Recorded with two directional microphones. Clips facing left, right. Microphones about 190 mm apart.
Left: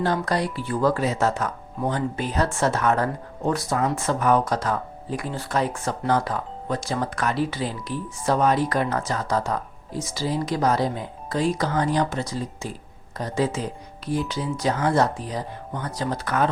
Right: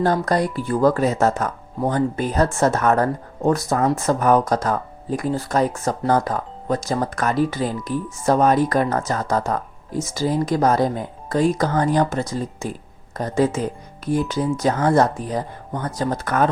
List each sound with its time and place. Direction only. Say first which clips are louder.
0.0 s speech: right 4 dB; 45° right (ahead or behind)